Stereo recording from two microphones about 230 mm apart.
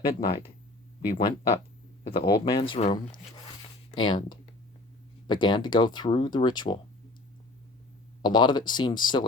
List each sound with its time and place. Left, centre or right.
0.1 s speech: left
2.0 s speech: left
8.2 s speech: centre